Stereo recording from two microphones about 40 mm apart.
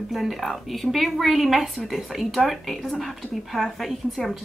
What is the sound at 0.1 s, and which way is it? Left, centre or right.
Speech, centre.